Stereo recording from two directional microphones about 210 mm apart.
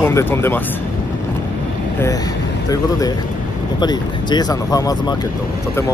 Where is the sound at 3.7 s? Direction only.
20° left (ahead or behind).